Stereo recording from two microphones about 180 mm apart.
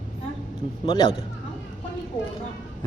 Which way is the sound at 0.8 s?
25° left (ahead or behind).